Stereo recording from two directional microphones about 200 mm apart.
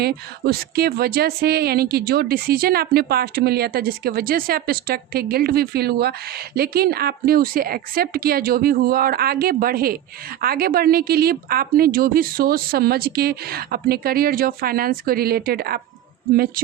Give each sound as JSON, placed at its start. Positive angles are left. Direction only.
{"t": 0.0, "sound": "a woman's voice", "side_deg": -50}